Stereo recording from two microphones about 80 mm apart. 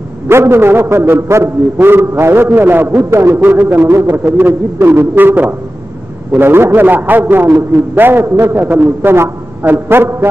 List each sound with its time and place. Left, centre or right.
0.3 s a man's voice: right